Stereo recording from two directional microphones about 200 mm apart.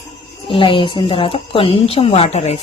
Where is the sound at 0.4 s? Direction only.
25° left (ahead or behind).